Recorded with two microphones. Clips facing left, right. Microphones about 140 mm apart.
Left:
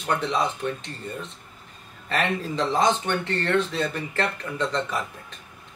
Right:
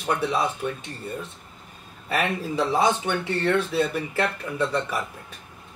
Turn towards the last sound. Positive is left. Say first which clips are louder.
# right 1 dB
turn(degrees=-10)  # may be behind; listen again after turning